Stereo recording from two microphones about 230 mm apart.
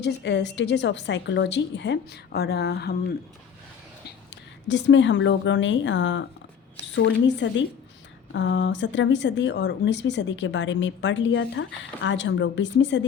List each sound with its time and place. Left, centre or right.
0.0 s speech: left
4.7 s speech: left